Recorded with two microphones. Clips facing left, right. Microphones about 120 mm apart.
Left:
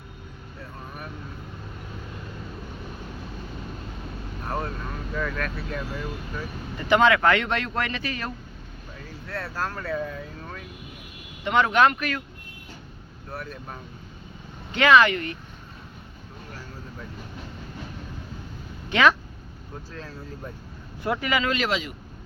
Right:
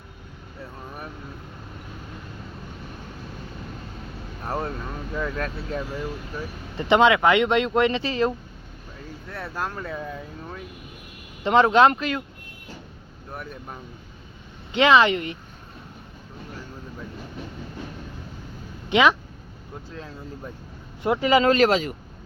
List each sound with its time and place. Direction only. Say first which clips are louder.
4.4 s vehicle: right 2 dB; 30° right (ahead or behind)
5.1 s speech: right 1 dB; 25° right (ahead or behind)
11.4 s speech: right 4 dB; 30° right (ahead or behind)
13.3 s speech: even; 15° right (ahead or behind)
18.9 s speech: right 1 dB; 20° right (ahead or behind); by 21.9 s 45° right (ahead or behind)